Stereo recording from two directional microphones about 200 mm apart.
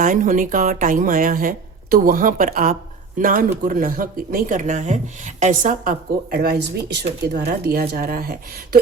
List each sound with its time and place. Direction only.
0.0 s speech: 40° right (ahead or behind)